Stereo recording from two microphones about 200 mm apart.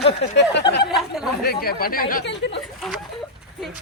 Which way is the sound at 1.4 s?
50° left (ahead or behind).